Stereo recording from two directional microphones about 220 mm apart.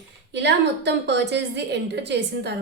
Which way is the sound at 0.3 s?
50° right (ahead or behind).